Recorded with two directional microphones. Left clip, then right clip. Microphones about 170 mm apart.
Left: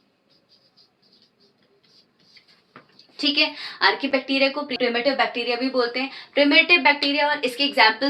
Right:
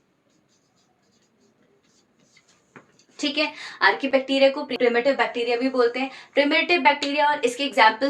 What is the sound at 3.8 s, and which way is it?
A woman's voice, 45° right (ahead or behind).